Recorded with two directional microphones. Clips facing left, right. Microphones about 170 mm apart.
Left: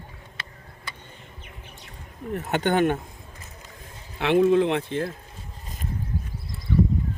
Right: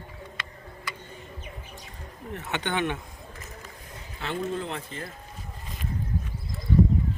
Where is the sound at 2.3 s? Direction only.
40° left (ahead or behind).